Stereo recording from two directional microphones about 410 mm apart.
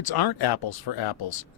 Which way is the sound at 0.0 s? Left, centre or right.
Left.